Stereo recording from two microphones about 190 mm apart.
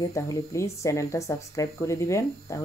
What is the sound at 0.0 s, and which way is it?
Speech, 15° left (ahead or behind).